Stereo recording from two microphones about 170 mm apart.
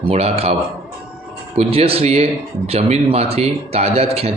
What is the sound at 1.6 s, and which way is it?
Speech, 35° right (ahead or behind).